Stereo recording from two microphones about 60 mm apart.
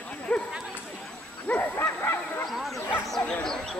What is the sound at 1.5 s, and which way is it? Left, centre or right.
Speech, left.